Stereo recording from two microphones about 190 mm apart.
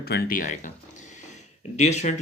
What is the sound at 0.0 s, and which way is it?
Speech, 55° left (ahead or behind).